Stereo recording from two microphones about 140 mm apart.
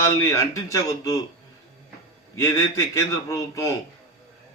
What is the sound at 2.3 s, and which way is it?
A man's voice, 20° left (ahead or behind).